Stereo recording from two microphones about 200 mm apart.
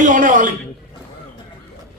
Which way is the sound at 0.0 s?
40° right (ahead or behind).